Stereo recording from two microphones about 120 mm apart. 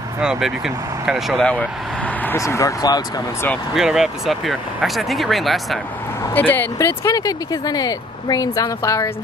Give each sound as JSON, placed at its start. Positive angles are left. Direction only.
{"t": 0.2, "sound": "speech", "side_deg": -5}
{"t": 2.3, "sound": "speech", "side_deg": 25}
{"t": 3.7, "sound": "speech", "side_deg": -5}
{"t": 6.2, "sound": "speech", "side_deg": 15}